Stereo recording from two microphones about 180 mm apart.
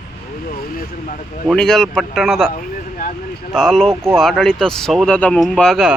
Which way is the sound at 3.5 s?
Centre (ahead or behind).